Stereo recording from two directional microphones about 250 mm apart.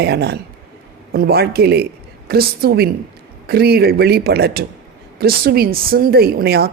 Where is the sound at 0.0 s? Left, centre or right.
Right.